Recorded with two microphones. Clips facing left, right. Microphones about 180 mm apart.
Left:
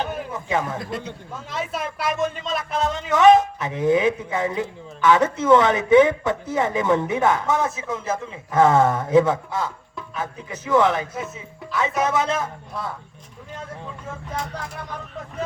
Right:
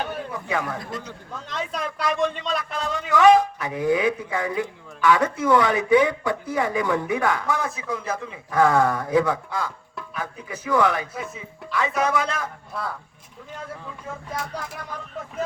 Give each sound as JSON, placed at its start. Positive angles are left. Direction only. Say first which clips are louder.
{"t": 0.0, "sound": "a sound", "louder": "left 2 dB", "side_deg": 20}
{"t": 1.5, "sound": "speech", "louder": "left 1 dB", "side_deg": 5}
{"t": 2.7, "sound": "a man's voice", "louder": "left 3 dB", "side_deg": 20}